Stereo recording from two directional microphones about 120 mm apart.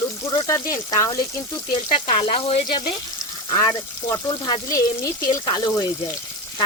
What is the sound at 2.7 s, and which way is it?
Speech, 40° left (ahead or behind).